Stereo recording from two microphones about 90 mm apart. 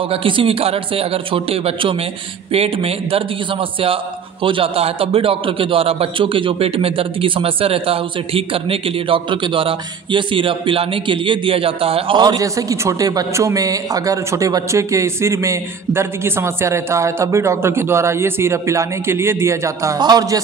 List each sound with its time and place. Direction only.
0.1 s a man's voice: 80° right
12.2 s a man's voice: 55° right (ahead or behind)
12.5 s speech: 40° right (ahead or behind)
20.0 s a man's voice: 45° right (ahead or behind)